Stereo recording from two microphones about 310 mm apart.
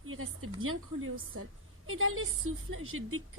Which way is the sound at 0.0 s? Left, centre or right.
Right.